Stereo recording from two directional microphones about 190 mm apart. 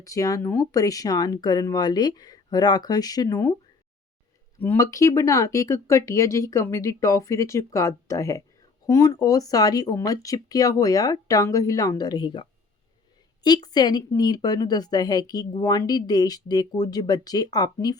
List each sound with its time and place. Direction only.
0.0 s a woman's voice: 20° left (ahead or behind)
4.6 s a woman's voice: 15° left (ahead or behind)